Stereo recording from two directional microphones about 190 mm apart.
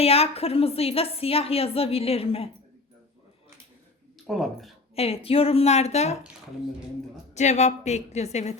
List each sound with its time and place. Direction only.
0.0 s a woman's voice: 30° left (ahead or behind)
4.3 s speech: centre (ahead or behind)
4.9 s a woman's voice: 30° left (ahead or behind)
7.3 s a woman's voice: 35° left (ahead or behind)